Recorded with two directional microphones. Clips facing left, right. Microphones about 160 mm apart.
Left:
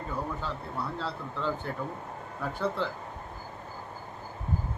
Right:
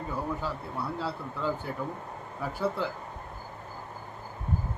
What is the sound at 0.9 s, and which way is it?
A man's voice, 10° right (ahead or behind).